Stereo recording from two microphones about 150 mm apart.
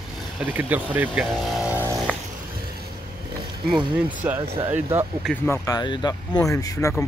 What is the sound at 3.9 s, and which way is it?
Speech, 10° right (ahead or behind).